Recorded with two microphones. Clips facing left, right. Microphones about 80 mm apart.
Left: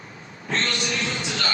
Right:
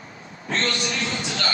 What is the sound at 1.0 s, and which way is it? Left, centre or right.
Music, right.